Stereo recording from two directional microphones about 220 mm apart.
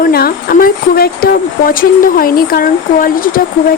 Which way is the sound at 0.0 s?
40° left (ahead or behind).